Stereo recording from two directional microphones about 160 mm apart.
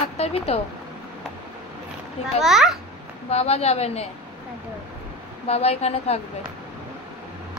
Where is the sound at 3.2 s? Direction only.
40° left (ahead or behind).